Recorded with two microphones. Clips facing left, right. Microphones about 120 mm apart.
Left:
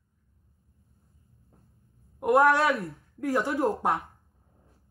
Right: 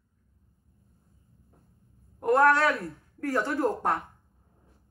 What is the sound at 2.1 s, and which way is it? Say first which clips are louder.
Speech: left 1 dB; 10° left (ahead or behind).